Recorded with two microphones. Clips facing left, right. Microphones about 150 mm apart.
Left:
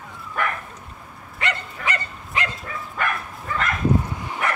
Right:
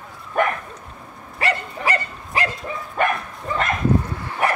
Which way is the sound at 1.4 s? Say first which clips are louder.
Right 4 dB; 35° right (ahead or behind).